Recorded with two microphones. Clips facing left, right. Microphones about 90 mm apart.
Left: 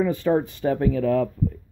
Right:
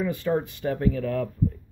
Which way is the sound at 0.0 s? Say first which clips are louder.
Left 4 dB; 35° left (ahead or behind).